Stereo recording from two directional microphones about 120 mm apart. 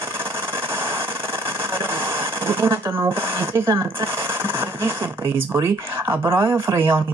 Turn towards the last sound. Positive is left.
turn(degrees=-25)  # may be behind; listen again after turning